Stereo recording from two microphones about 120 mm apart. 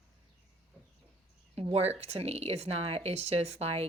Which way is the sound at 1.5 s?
60° right (ahead or behind).